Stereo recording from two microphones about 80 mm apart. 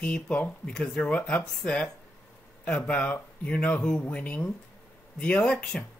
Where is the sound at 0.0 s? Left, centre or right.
Centre.